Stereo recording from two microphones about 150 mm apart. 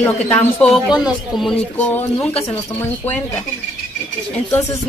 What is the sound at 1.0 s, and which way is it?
Speech, centre (ahead or behind).